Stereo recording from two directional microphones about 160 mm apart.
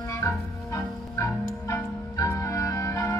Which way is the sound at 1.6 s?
20° left (ahead or behind).